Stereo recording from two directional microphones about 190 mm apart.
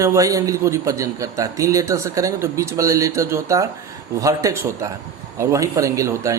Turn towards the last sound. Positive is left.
turn(degrees=-15)  # may be behind; listen again after turning